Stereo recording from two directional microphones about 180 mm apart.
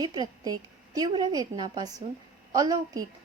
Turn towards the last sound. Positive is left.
turn(degrees=-20)  # may be behind; listen again after turning